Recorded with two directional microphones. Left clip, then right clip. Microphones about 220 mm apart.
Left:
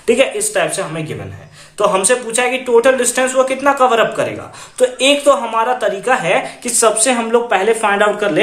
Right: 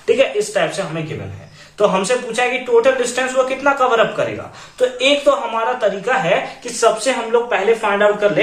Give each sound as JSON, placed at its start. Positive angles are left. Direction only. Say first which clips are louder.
{"t": 0.0, "sound": "a woman's voice", "louder": "left 1 dB", "side_deg": 45}
{"t": 1.8, "sound": "a woman's voice", "louder": "left 2 dB", "side_deg": 45}